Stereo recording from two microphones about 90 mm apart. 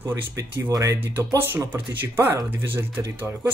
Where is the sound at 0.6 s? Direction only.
40° right (ahead or behind).